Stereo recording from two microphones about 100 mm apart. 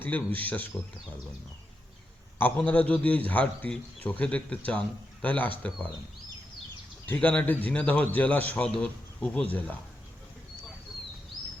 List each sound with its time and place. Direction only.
0.0 s a man's voice: 15° left (ahead or behind)
2.4 s a man's voice: 15° left (ahead or behind)
7.0 s a man's voice: 15° left (ahead or behind)